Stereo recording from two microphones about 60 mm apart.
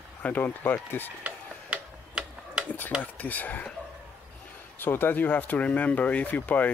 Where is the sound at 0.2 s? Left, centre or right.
Left.